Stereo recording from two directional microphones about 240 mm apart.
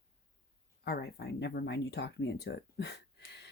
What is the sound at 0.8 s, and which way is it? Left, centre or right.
Speech, left.